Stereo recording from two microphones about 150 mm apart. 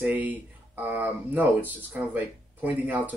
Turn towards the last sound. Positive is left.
turn(degrees=-10)  # may be behind; listen again after turning